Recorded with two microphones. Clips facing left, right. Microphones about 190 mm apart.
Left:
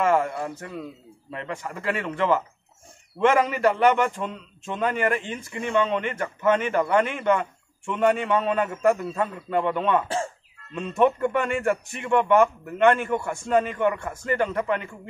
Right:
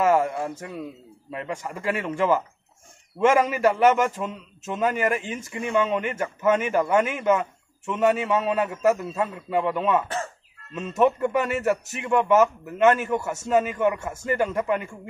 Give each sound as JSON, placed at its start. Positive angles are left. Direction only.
{"t": 0.0, "sound": "a man's voice", "side_deg": -10}
{"t": 10.0, "sound": "crow", "side_deg": 30}
{"t": 10.7, "sound": "a man's voice", "side_deg": -5}